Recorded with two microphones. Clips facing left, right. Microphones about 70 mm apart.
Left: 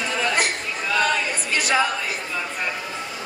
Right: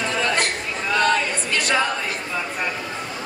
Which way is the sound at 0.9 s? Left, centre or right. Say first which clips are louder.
Right 2 dB; centre.